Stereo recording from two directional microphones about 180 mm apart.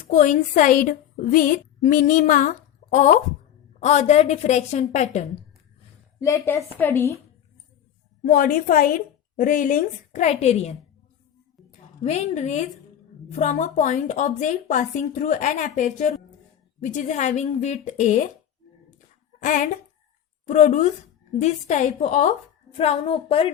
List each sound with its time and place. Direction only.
0.0 s a woman's voice: 45° left (ahead or behind)
6.1 s a woman's voice: 15° left (ahead or behind)
8.2 s a woman's voice: 50° left (ahead or behind)
12.0 s a woman's voice: 40° left (ahead or behind)
19.4 s a woman's voice: 45° left (ahead or behind)